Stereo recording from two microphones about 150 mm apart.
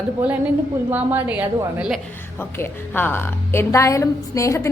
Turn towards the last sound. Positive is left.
turn(degrees=20)  # may be behind; listen again after turning